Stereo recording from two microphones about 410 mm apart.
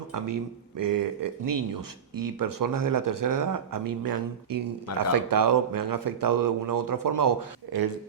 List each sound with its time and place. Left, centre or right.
0.8 s speech: right